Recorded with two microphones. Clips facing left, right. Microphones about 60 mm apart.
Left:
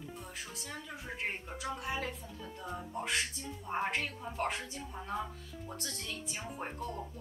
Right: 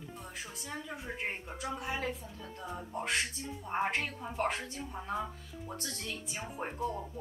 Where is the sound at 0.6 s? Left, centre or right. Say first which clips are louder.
Right 3 dB; centre.